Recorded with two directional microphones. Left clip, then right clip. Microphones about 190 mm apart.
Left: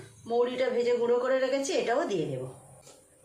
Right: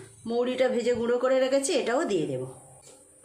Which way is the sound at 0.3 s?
55° right (ahead or behind).